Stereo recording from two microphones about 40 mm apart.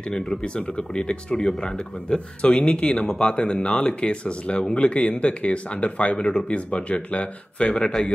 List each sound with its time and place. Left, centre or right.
0.4 s speech: left